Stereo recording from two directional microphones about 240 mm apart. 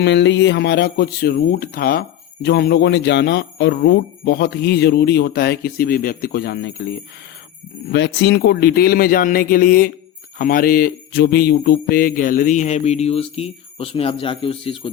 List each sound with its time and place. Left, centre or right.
0.0 s speech: left